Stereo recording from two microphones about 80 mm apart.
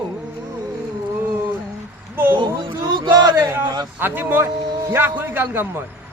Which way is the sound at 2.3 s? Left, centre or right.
Right.